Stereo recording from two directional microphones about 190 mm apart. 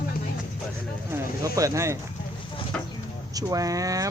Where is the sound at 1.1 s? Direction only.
15° right (ahead or behind).